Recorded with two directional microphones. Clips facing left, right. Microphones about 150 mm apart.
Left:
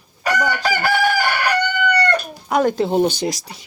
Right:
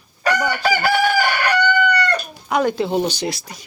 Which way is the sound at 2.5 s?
45° left (ahead or behind).